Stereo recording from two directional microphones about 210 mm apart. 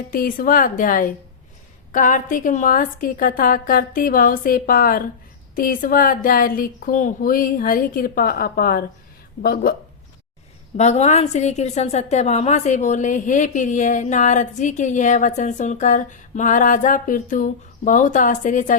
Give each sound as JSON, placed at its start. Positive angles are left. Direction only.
{"t": 0.1, "sound": "a woman's voice", "side_deg": 45}
{"t": 10.8, "sound": "a woman's voice", "side_deg": 30}